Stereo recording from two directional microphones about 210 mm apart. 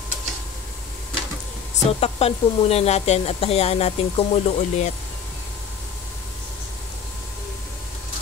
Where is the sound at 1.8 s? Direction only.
30° left (ahead or behind).